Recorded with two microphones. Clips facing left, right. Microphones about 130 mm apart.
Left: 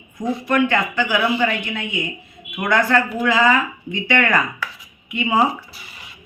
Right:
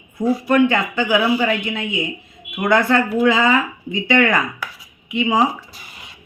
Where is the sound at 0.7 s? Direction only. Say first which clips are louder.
Right 2 dB; 15° right (ahead or behind).